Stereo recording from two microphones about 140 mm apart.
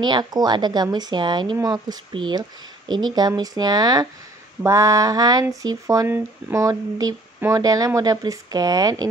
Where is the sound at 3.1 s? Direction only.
30° right (ahead or behind).